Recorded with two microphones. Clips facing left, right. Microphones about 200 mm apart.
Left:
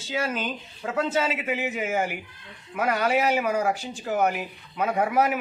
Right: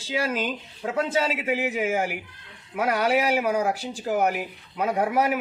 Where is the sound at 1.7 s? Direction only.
5° right (ahead or behind).